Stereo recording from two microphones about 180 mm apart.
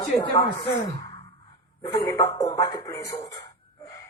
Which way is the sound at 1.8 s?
20° left (ahead or behind).